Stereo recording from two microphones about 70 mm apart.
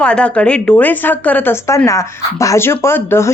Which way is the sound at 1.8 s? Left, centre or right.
Left.